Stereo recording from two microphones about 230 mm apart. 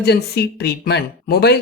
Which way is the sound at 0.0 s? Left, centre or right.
Left.